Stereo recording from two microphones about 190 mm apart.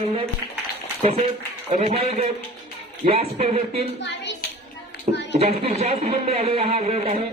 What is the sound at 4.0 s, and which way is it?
Clapping, 65° left (ahead or behind).